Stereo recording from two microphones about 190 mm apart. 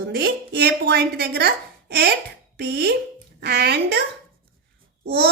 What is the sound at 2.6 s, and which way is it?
A woman's voice, 60° right (ahead or behind).